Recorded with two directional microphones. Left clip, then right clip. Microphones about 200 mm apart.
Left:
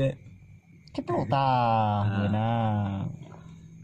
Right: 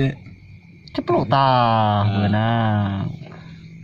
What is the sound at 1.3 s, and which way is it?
Speech, 35° right (ahead or behind).